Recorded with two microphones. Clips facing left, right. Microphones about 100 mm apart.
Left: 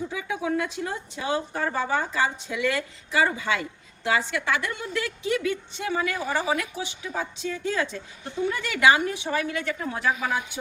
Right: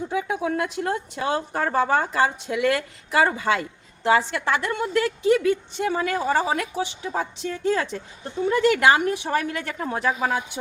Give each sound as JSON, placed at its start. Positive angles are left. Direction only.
{"t": 0.1, "sound": "a woman's voice", "side_deg": -55}
{"t": 10.1, "sound": "a woman's voice", "side_deg": -35}